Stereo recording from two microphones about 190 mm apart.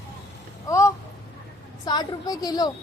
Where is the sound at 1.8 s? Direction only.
20° left (ahead or behind).